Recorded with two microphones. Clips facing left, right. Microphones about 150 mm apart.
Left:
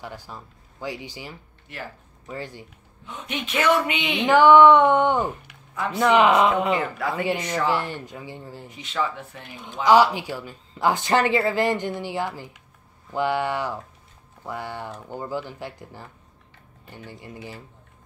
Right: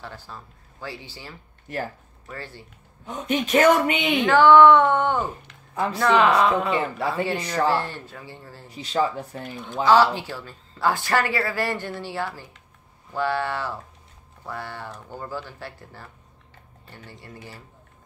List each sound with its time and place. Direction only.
0.0 s a woman's voice: 15° left (ahead or behind)
1.7 s speech: 45° right (ahead or behind)
2.2 s a woman's voice: 15° left (ahead or behind)
3.1 s speech: 40° right (ahead or behind)
4.3 s a woman's voice: 15° left (ahead or behind)
6.8 s speech: 30° right (ahead or behind)
7.7 s a woman's voice: 15° left (ahead or behind)
8.6 s speech: 35° right (ahead or behind)
9.8 s a woman's voice: 15° left (ahead or behind)